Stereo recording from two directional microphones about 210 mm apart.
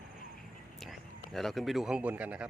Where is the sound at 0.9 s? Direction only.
Centre (ahead or behind).